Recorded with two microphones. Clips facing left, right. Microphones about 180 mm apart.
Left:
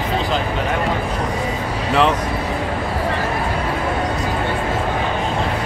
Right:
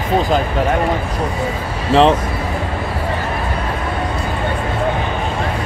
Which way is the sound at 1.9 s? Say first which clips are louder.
Right 5 dB; 30° right (ahead or behind).